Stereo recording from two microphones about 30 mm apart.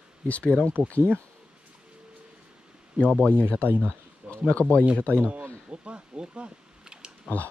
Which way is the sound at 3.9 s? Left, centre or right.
Left.